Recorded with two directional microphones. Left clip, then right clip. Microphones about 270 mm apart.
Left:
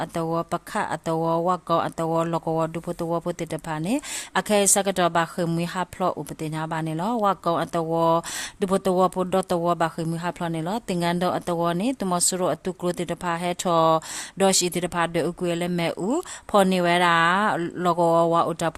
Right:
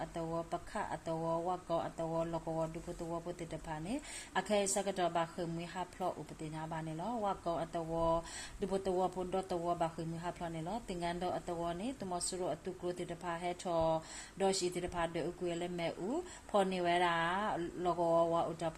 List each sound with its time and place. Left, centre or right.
0.0 s speech: left